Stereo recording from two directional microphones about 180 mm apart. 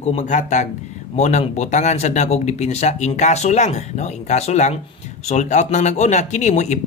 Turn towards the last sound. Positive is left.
turn(degrees=40)  # may be behind; listen again after turning